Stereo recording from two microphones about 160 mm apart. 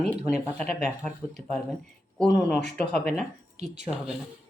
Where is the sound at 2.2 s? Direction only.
90° left.